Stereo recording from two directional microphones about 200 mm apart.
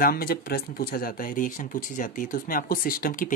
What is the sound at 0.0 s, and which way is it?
Speech, 45° left (ahead or behind).